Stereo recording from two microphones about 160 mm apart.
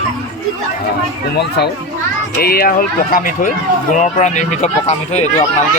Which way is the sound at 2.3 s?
70° left (ahead or behind).